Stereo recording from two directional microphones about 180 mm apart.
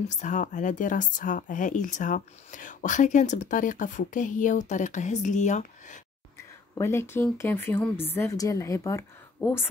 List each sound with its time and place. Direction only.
0.1 s speech: 40° left (ahead or behind)
6.8 s a woman's voice: 15° left (ahead or behind)